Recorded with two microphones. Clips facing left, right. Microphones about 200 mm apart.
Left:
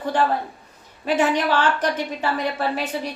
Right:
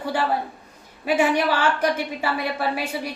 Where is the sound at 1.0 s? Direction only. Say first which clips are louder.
Even; 10° right (ahead or behind).